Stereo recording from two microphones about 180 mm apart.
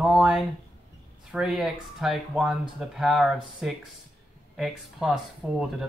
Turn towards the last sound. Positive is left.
turn(degrees=0)  # may be behind; listen again after turning